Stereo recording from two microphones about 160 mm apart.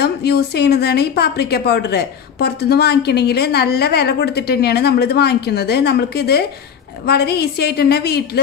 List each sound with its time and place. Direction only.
0.0 s a woman's voice: 90° left